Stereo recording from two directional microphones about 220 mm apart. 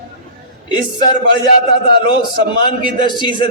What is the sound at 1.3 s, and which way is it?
A man's voice, 20° left (ahead or behind).